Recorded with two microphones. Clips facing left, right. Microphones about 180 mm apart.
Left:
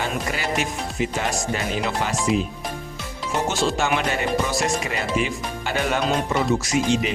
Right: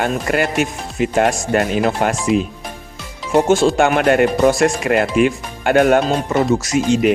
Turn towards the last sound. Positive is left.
turn(degrees=-45)  # may be behind; listen again after turning